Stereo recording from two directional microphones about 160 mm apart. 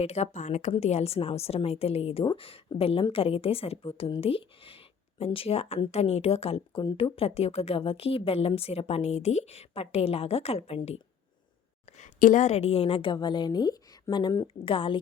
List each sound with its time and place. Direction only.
0.0 s a woman's voice: 45° left (ahead or behind)
11.9 s a woman's voice: 50° left (ahead or behind); by 14.9 s 35° left (ahead or behind)